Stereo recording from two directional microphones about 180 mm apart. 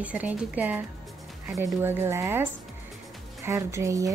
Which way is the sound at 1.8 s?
10° right (ahead or behind).